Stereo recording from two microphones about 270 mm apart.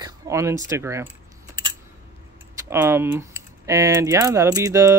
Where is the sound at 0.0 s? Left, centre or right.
Centre.